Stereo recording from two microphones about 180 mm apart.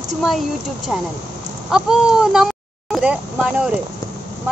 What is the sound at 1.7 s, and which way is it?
Speech, 5° right (ahead or behind).